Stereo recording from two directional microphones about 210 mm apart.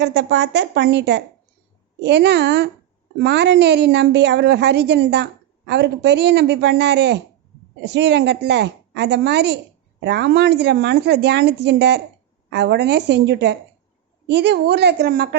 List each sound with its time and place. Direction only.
0.0 s a woman's voice: 55° right (ahead or behind)